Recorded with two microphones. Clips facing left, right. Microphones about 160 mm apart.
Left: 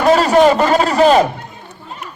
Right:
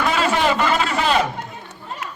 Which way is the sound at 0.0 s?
40° left (ahead or behind).